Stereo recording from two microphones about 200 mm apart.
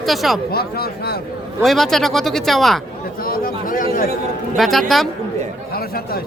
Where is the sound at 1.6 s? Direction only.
Centre (ahead or behind).